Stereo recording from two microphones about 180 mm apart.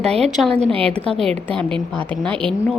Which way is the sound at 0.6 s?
30° right (ahead or behind).